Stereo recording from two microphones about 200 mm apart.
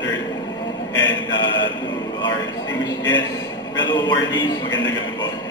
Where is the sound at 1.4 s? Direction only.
20° left (ahead or behind).